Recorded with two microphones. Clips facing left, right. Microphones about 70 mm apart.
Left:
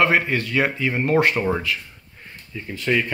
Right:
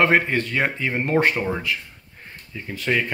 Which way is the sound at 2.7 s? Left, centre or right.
Centre.